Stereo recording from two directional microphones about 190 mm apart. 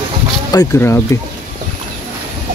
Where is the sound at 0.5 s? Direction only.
15° left (ahead or behind).